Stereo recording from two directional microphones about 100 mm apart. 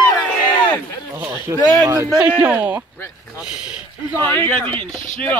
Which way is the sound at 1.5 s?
30° right (ahead or behind).